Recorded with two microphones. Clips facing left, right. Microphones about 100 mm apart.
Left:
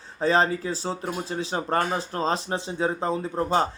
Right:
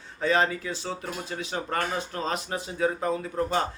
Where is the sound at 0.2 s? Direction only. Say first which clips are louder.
Left 3 dB; 35° left (ahead or behind).